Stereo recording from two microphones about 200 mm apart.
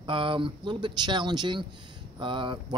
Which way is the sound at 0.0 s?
25° right (ahead or behind).